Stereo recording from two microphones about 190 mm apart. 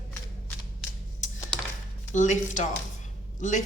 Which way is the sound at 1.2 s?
40° left (ahead or behind).